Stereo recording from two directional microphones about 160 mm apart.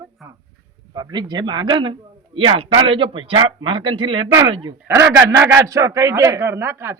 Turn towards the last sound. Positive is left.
turn(degrees=-15)  # may be behind; listen again after turning